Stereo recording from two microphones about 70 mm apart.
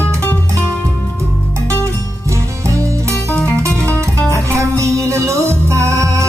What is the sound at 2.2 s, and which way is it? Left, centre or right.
Music, right.